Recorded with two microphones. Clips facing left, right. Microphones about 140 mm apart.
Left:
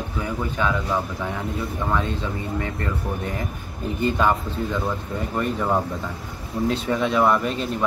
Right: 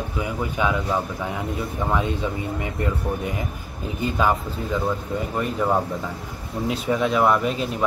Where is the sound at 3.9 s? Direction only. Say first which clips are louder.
Left 1 dB; 5° right (ahead or behind).